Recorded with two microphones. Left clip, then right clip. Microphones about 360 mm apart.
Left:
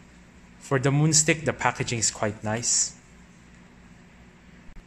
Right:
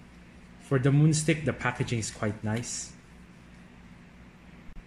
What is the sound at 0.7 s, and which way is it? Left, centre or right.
A man's voice, centre.